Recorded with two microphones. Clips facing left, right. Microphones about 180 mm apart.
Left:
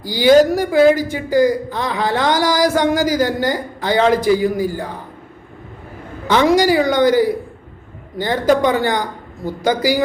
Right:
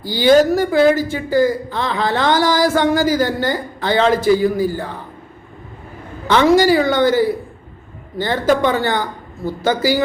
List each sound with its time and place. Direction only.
0.1 s speech: 15° left (ahead or behind)
6.2 s speech: 15° left (ahead or behind)